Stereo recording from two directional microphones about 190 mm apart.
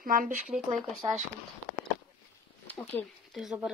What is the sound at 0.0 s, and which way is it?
Speech, 45° right (ahead or behind).